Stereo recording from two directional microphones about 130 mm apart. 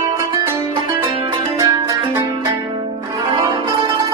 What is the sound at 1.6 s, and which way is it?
Music, 30° right (ahead or behind).